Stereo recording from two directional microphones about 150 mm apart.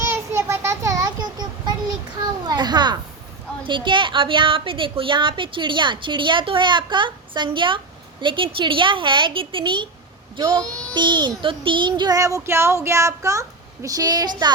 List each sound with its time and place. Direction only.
0.0 s child singing: 15° right (ahead or behind)
2.5 s a child's voice: 30° right (ahead or behind)
10.9 s child singing: 30° right (ahead or behind)